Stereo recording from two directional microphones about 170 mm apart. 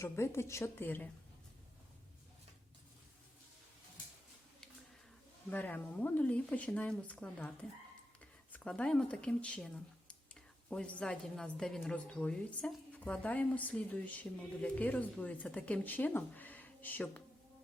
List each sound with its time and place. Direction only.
0.0 s a woman's voice: 15° left (ahead or behind)
5.5 s a woman's voice: 10° left (ahead or behind)
8.5 s a woman's voice: 5° left (ahead or behind)